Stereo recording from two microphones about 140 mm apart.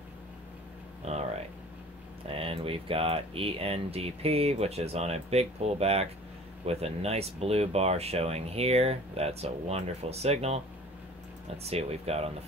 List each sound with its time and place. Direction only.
2.2 s speech: 40° right (ahead or behind)